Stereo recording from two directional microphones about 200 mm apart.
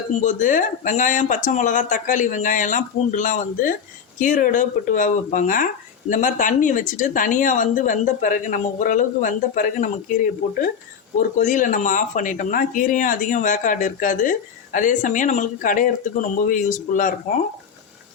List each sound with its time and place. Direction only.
0.2 s speech: 40° left (ahead or behind)